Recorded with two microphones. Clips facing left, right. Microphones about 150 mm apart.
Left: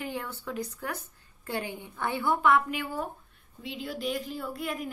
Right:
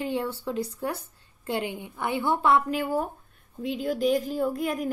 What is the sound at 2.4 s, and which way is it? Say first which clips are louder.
A woman's voice: right 2 dB; 35° right (ahead or behind).